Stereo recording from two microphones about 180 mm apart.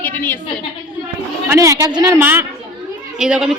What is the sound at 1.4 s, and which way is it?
A woman's voice, 15° right (ahead or behind).